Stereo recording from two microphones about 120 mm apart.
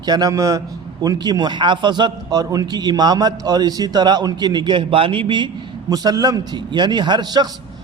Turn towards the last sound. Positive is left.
turn(degrees=-35)  # may be behind; listen again after turning